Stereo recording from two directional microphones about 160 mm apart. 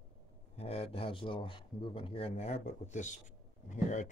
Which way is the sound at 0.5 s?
40° left (ahead or behind).